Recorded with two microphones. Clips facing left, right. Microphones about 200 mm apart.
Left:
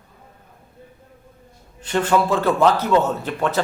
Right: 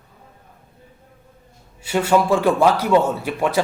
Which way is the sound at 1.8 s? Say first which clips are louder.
Right 1 dB; 10° right (ahead or behind).